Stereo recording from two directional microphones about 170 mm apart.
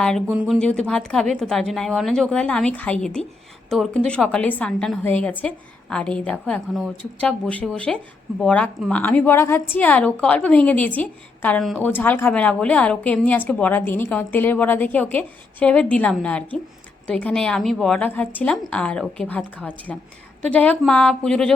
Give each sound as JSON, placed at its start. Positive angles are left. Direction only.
{"t": 0.3, "sound": "a woman's voice", "side_deg": -5}